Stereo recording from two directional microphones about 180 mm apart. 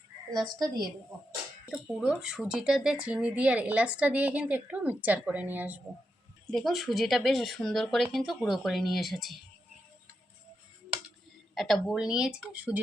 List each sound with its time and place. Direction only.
0.3 s a woman's voice: 20° right (ahead or behind)
1.7 s speech: 5° right (ahead or behind)
6.5 s speech: centre (ahead or behind)
11.5 s speech: centre (ahead or behind)